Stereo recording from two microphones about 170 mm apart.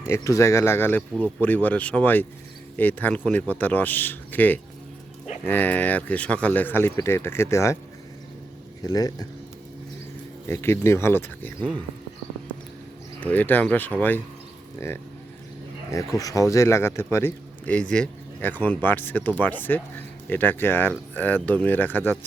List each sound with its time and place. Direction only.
0.1 s speech: 15° left (ahead or behind)
8.8 s speech: 20° left (ahead or behind)
10.5 s speech: 15° left (ahead or behind)
13.1 s speech: 10° left (ahead or behind)
16.1 s speech: 20° left (ahead or behind)